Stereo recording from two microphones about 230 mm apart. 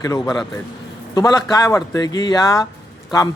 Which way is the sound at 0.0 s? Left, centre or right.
Centre.